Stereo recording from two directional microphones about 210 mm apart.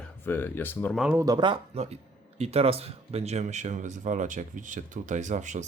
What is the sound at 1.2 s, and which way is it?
Speech, 20° right (ahead or behind).